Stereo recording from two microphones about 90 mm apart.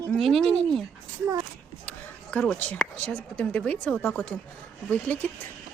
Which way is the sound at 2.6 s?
15° left (ahead or behind).